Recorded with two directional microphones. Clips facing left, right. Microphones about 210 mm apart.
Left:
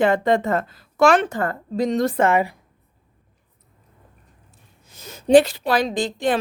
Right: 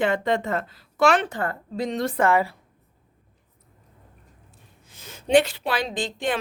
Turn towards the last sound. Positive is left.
turn(degrees=40)  # may be behind; listen again after turning